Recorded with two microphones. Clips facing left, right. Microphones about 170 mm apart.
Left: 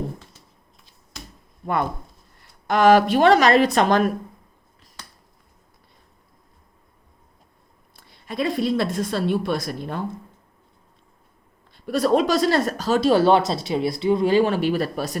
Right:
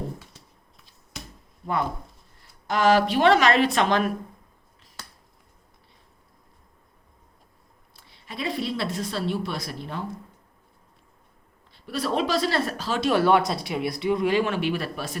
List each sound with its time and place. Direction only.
2.6 s speech: 55° left (ahead or behind)
7.9 s speech: 50° left (ahead or behind)
11.7 s speech: 50° left (ahead or behind)